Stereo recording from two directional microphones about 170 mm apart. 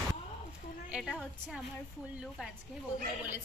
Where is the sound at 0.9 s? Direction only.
Centre (ahead or behind).